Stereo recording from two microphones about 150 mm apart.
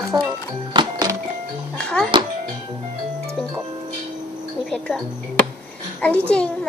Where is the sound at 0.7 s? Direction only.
30° right (ahead or behind).